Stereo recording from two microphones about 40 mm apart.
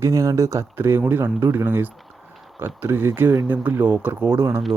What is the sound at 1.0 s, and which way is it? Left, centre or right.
Speech, right.